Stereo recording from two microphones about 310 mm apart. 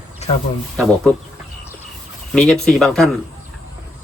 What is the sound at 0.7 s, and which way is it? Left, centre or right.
Speech, centre.